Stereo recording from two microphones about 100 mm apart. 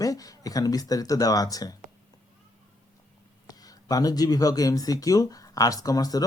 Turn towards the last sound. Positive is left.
turn(degrees=40)  # may be behind; listen again after turning